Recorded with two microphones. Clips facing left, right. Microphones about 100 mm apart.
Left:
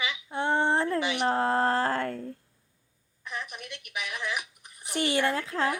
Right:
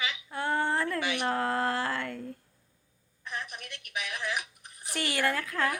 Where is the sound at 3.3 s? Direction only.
45° right (ahead or behind).